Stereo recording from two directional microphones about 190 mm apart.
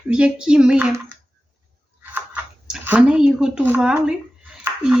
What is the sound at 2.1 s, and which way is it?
Speech, 5° right (ahead or behind).